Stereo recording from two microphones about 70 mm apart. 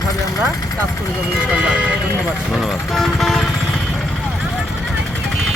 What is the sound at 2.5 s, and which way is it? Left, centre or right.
Speech, centre.